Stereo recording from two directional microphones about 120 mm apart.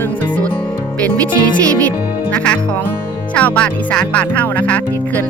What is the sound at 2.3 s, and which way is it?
Speech, 10° left (ahead or behind).